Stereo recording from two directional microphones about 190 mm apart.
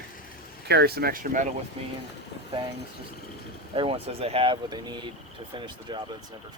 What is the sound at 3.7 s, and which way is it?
Speech, 30° right (ahead or behind).